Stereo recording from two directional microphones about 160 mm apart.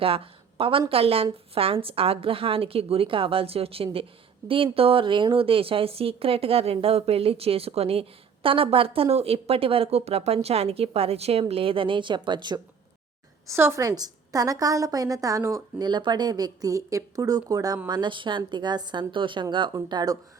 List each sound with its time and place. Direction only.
0.0 s a woman's voice: 35° right (ahead or behind)
13.5 s a woman's voice: 15° right (ahead or behind)